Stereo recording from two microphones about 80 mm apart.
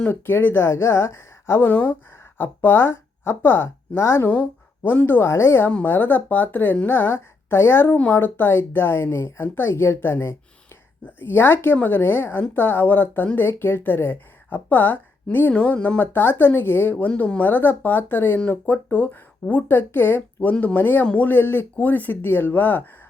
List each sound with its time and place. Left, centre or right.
0.0 s a woman's voice: left
4.3 s a woman's voice: left